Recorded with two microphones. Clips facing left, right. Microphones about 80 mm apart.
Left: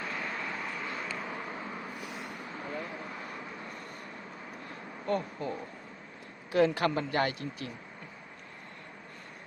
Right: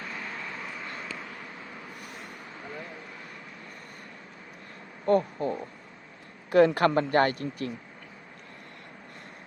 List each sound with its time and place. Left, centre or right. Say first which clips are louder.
0.0 s vehicle: left 1 dB; centre
1.2 s vehicle: left 4 dB; left
5.0 s speech: right 8 dB; right
6.5 s a man's voice: right 6 dB; right